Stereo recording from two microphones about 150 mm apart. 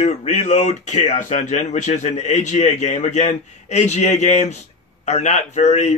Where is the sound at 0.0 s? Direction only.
50° left (ahead or behind).